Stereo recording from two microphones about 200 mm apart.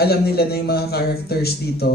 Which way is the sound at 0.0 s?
50° left (ahead or behind).